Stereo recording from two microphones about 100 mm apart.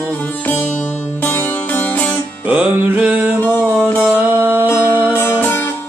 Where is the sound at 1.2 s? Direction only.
20° left (ahead or behind).